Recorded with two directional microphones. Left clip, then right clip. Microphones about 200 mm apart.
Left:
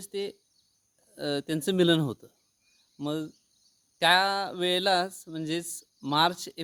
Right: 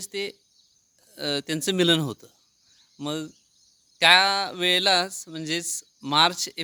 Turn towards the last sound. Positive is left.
turn(degrees=0)  # may be behind; listen again after turning